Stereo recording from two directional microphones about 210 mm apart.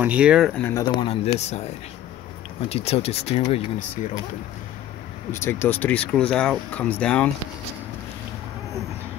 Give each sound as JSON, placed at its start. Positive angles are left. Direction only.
{"t": 0.0, "sound": "speech", "side_deg": -5}
{"t": 0.8, "sound": "speech", "side_deg": 25}
{"t": 2.7, "sound": "speech", "side_deg": 30}
{"t": 5.3, "sound": "speech", "side_deg": 10}